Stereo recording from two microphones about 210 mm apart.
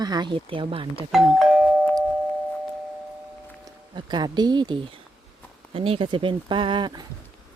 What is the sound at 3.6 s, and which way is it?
Speech, 20° right (ahead or behind).